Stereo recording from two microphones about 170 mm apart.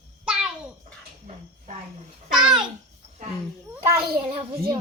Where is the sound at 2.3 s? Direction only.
5° right (ahead or behind).